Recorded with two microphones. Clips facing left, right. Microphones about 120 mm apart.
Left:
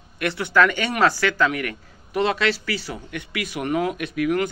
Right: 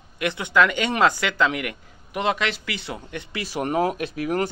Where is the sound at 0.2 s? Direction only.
20° right (ahead or behind).